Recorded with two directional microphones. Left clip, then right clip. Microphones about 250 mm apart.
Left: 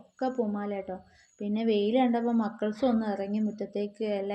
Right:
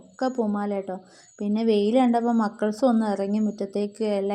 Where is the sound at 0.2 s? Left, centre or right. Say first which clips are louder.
Right 5 dB; right.